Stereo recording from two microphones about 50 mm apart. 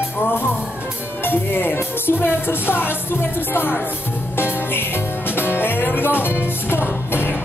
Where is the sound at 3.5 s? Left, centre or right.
Left.